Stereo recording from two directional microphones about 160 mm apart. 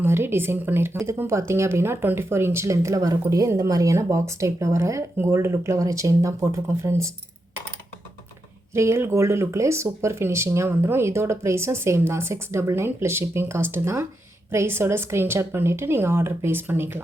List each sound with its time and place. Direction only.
0.0 s a woman's voice: 15° right (ahead or behind)
8.7 s a woman's voice: 15° right (ahead or behind)